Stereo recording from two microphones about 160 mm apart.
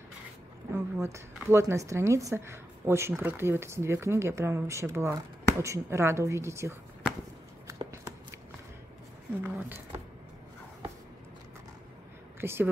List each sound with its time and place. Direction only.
0.7 s a woman's voice: 20° right (ahead or behind)
7.6 s a sound: 20° right (ahead or behind)
9.4 s speech: 15° right (ahead or behind)
12.4 s speech: 15° right (ahead or behind)